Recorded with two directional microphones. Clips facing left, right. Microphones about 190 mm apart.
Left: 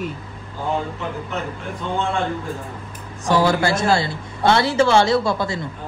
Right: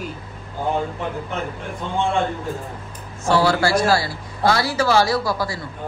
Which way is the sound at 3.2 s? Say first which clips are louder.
Even; 15° left (ahead or behind).